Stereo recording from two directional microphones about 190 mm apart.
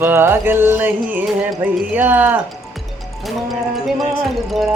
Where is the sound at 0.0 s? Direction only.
10° right (ahead or behind).